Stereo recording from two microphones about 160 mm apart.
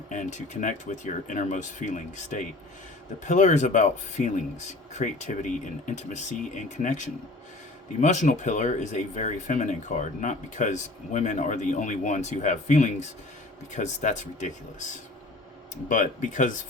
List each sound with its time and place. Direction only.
0.1 s speech: 50° left (ahead or behind)
15.9 s speech: 50° left (ahead or behind)